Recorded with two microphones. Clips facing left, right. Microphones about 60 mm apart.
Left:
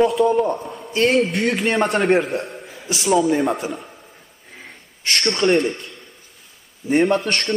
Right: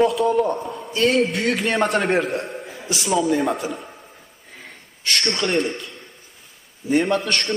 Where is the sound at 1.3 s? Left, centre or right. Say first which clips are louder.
Left 1 dB; right.